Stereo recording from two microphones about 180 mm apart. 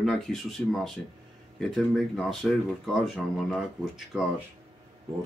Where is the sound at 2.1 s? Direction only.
Centre (ahead or behind).